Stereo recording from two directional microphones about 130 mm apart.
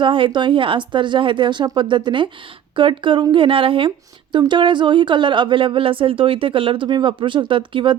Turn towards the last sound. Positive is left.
turn(degrees=-40)  # may be behind; listen again after turning